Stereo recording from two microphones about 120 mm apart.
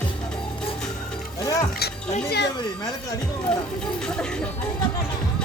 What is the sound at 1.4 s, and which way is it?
Music, 30° left (ahead or behind).